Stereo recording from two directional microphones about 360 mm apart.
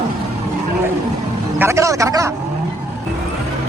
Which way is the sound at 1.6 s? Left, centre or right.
Centre.